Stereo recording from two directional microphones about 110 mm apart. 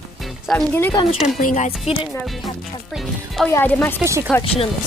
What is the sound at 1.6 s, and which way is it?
Speech, 65° left (ahead or behind).